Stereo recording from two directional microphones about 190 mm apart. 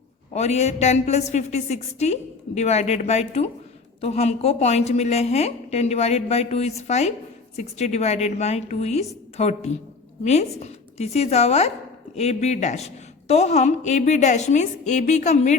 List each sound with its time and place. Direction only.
0.3 s a woman's voice: 35° left (ahead or behind)